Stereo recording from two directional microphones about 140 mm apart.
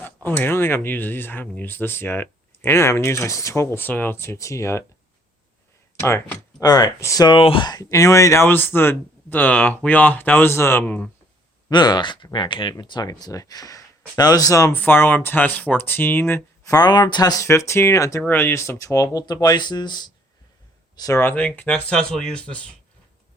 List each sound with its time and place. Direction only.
0.0 s speech: 15° left (ahead or behind)
6.0 s speech: 20° left (ahead or behind)
6.6 s speech: 30° left (ahead or behind); by 11.1 s 10° left (ahead or behind)
11.7 s speech: 30° left (ahead or behind); by 16.7 s 15° left (ahead or behind)
16.7 s speech: 30° left (ahead or behind)
21.2 s speech: 10° left (ahead or behind)